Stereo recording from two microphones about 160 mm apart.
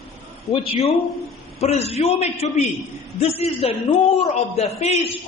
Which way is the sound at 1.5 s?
40° left (ahead or behind).